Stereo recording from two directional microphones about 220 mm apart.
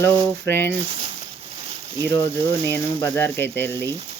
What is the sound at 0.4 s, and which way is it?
Speech, 10° left (ahead or behind).